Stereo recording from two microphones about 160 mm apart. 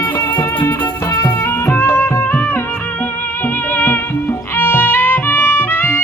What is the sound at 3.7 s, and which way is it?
Music, 10° left (ahead or behind).